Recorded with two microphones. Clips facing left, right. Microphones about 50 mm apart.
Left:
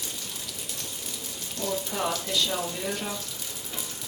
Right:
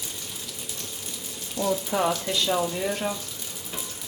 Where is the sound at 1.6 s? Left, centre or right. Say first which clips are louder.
Right 7 dB; centre.